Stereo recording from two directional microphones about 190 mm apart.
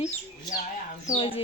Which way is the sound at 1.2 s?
30° left (ahead or behind).